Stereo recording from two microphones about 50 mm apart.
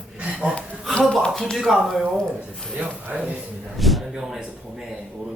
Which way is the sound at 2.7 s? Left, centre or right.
Right.